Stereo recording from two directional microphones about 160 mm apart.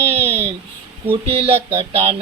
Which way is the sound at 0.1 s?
40° right (ahead or behind).